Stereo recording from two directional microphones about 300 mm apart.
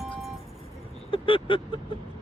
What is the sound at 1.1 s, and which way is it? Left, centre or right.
Vehicle, centre.